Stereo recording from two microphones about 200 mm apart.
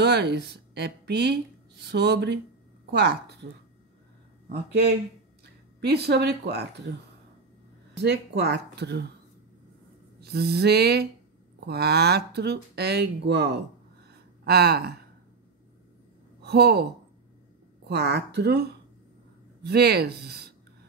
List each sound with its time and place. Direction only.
0.0 s a woman's voice: 55° right (ahead or behind)
4.5 s a woman's voice: 55° right (ahead or behind)
10.2 s a woman's voice: 55° right (ahead or behind)
16.4 s speech: 55° right (ahead or behind)
17.8 s a woman's voice: 55° right (ahead or behind)